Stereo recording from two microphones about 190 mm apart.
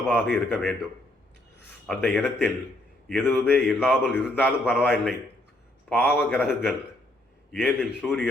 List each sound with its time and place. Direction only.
0.1 s a man's voice: 5° left (ahead or behind)
1.9 s a man's voice: 5° left (ahead or behind)